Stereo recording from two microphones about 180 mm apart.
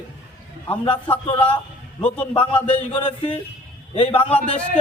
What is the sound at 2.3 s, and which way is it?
Speech, 25° left (ahead or behind).